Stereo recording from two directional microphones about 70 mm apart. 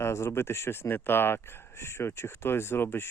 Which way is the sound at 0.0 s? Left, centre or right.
Left.